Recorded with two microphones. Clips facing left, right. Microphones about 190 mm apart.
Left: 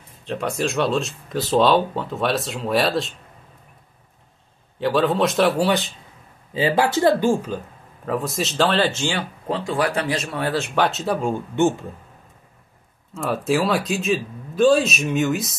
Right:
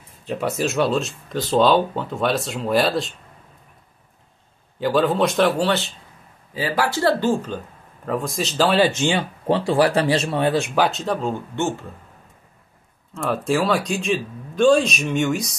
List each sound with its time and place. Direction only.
0.2 s speech: 5° right (ahead or behind)
4.7 s speech: centre (ahead or behind)
6.5 s speech: 25° left (ahead or behind); by 9.6 s 20° right (ahead or behind)
9.7 s speech: 35° right (ahead or behind)
10.7 s speech: centre (ahead or behind); by 11.7 s 15° left (ahead or behind)
13.1 s speech: centre (ahead or behind)